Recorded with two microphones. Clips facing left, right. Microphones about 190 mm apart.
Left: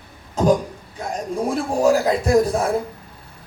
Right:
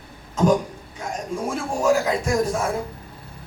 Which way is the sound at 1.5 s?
35° left (ahead or behind).